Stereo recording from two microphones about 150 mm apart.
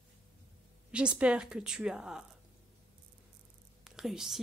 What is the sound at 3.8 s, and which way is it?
Speech, 5° right (ahead or behind).